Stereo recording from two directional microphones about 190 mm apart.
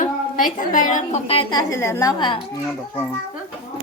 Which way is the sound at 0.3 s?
45° left (ahead or behind).